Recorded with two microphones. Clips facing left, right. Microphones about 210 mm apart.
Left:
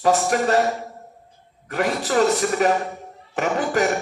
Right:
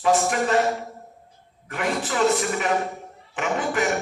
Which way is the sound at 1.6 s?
40° left (ahead or behind).